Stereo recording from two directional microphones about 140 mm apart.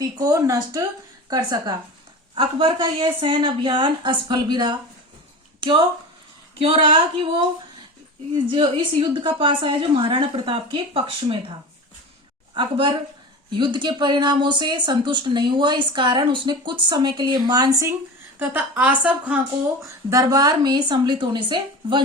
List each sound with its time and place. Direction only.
0.0 s speech: 25° right (ahead or behind)
8.4 s speech: 35° right (ahead or behind)
12.5 s speech: 35° right (ahead or behind)
18.3 s a woman's voice: 10° right (ahead or behind)
20.1 s speech: 25° right (ahead or behind)